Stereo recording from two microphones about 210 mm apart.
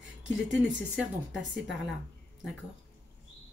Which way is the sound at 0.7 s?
5° right (ahead or behind).